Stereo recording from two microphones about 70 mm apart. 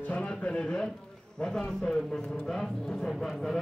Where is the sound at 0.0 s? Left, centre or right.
Centre.